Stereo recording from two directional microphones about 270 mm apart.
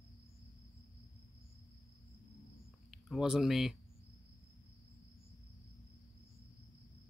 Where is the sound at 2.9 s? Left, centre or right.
Centre.